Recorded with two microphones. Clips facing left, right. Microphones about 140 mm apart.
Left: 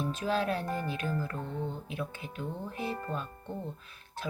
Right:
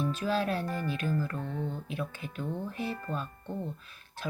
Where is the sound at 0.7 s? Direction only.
20° left (ahead or behind).